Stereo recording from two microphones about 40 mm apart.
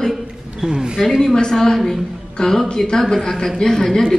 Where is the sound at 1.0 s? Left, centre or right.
Centre.